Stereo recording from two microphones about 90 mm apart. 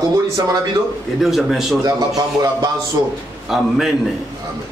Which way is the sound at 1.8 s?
45° right (ahead or behind).